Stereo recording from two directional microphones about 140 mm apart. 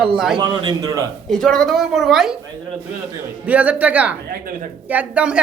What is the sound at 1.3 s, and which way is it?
Speech, 5° left (ahead or behind).